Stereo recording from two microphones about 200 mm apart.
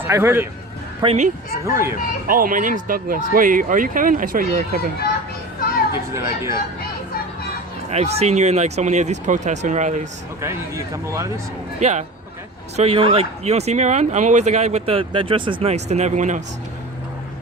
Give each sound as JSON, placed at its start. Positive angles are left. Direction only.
{"t": 0.1, "sound": "a man's voice", "side_deg": -10}
{"t": 1.0, "sound": "speech", "side_deg": -35}
{"t": 1.6, "sound": "a man's voice", "side_deg": -15}
{"t": 2.2, "sound": "speech", "side_deg": -45}
{"t": 6.1, "sound": "a man's voice", "side_deg": -15}
{"t": 7.9, "sound": "speech", "side_deg": -30}
{"t": 10.4, "sound": "a man's voice", "side_deg": -15}
{"t": 11.8, "sound": "speech", "side_deg": -35}